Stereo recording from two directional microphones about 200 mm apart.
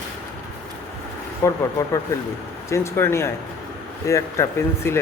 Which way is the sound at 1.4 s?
15° left (ahead or behind).